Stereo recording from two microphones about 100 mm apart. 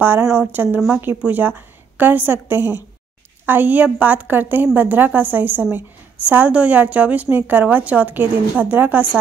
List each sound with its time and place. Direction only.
0.0 s a woman's voice: 20° right (ahead or behind)